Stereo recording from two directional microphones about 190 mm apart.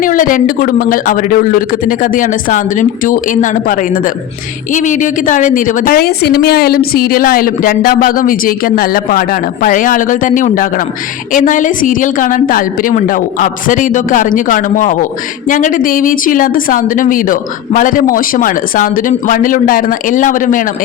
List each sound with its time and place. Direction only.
0.0 s a woman's voice: 45° left (ahead or behind)